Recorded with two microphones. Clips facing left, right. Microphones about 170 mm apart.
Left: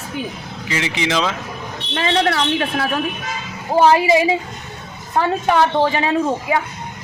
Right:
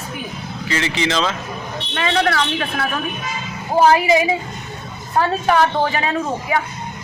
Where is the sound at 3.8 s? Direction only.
25° left (ahead or behind).